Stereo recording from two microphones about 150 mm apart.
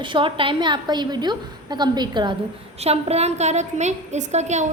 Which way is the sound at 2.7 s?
45° right (ahead or behind).